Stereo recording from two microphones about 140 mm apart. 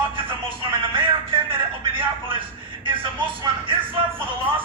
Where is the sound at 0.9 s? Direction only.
35° right (ahead or behind).